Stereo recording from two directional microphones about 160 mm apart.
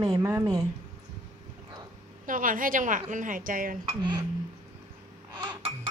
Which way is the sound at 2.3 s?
60° right (ahead or behind).